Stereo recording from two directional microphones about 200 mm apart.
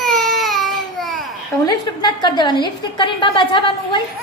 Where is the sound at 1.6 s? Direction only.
20° left (ahead or behind).